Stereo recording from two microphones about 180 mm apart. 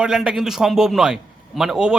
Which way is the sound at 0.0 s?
5° right (ahead or behind).